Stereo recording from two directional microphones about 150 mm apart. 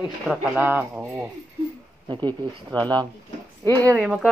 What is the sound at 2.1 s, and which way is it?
Speech, 30° right (ahead or behind).